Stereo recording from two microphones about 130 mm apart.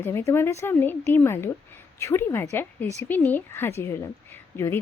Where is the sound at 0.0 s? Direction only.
20° left (ahead or behind).